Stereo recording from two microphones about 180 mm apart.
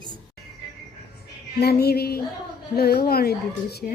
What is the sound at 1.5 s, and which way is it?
A woman's voice, 60° left (ahead or behind).